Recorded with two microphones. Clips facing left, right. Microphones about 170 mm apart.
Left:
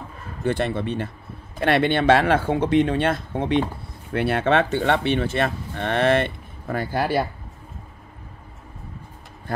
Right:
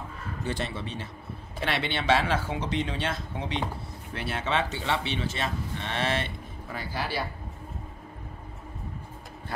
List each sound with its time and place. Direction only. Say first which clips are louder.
0.4 s speech: left 10 dB; 55° left (ahead or behind)